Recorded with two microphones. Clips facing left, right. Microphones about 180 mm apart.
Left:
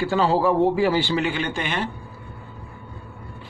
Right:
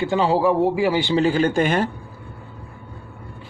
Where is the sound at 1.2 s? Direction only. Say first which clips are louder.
Right 7 dB; 40° right (ahead or behind).